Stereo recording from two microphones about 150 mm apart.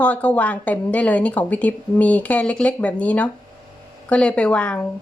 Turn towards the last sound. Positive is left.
turn(degrees=10)  # may be behind; listen again after turning